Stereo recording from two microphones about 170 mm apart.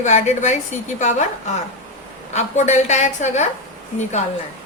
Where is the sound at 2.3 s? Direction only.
45° left (ahead or behind).